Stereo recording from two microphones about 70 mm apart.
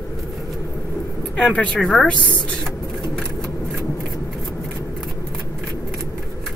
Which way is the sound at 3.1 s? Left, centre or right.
Centre.